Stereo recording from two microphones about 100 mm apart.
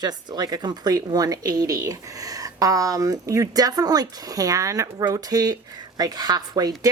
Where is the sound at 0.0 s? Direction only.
45° right (ahead or behind).